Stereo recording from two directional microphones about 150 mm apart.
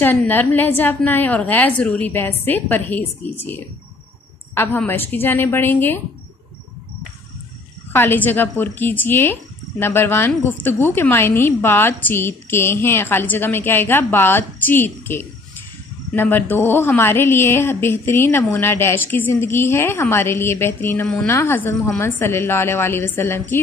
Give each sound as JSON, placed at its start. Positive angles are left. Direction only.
{"t": 0.0, "sound": "a woman's voice", "side_deg": 15}
{"t": 7.9, "sound": "a woman's voice", "side_deg": 15}